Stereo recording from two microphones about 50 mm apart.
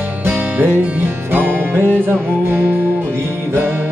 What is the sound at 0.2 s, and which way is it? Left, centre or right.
Music, right.